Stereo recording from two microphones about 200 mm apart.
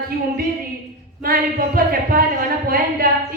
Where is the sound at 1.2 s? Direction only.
45° right (ahead or behind).